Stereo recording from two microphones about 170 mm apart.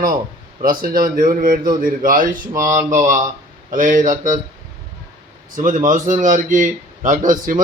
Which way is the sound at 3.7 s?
50° right (ahead or behind).